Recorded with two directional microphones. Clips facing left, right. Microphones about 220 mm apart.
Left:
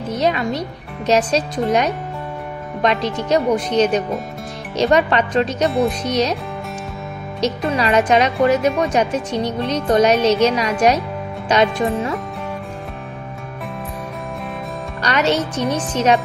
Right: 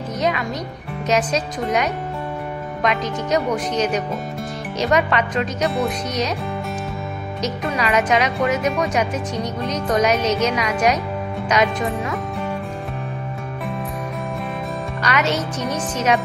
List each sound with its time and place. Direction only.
0.2 s speech: 30° left (ahead or behind)
7.4 s speech: 30° left (ahead or behind)
15.0 s speech: 30° left (ahead or behind)